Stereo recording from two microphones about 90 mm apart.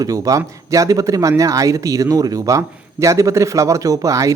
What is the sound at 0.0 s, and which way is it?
Speech, 40° right (ahead or behind).